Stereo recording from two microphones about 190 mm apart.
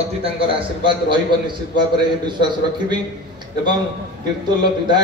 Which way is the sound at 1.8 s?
25° right (ahead or behind).